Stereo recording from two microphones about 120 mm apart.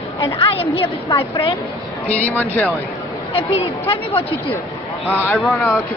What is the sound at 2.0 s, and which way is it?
Speech, 10° left (ahead or behind).